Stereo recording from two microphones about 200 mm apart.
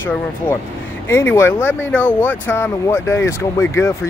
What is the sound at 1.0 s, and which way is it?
Speech, 10° left (ahead or behind).